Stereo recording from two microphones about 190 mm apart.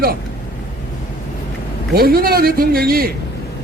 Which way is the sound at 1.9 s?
50° right (ahead or behind).